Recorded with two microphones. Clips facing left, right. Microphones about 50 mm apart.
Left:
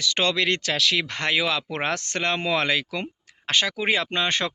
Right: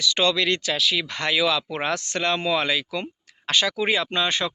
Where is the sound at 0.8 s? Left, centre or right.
Left.